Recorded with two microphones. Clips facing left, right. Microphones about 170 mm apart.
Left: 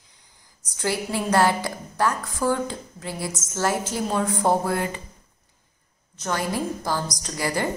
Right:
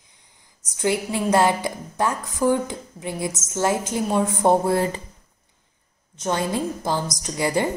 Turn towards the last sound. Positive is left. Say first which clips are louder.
# right 4 dB
turn(degrees=-20)  # may be behind; listen again after turning